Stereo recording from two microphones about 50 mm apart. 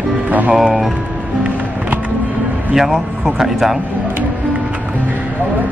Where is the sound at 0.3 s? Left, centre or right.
Right.